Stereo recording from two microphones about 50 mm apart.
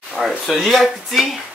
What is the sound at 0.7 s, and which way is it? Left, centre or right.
Speech, centre.